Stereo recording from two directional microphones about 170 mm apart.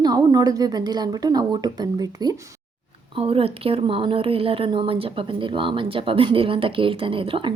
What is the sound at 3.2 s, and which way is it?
A woman's voice, 35° right (ahead or behind).